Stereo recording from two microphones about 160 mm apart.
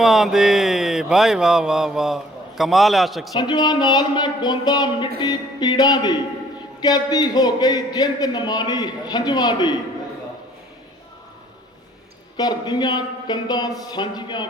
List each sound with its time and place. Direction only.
0.0 s a sound: centre (ahead or behind)
3.3 s a man's voice: 25° left (ahead or behind)
12.4 s a man's voice: 25° left (ahead or behind)